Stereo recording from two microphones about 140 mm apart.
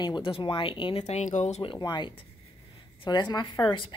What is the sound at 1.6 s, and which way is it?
Speech, 35° left (ahead or behind).